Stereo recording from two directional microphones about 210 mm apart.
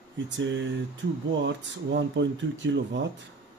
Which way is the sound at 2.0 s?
60° right (ahead or behind).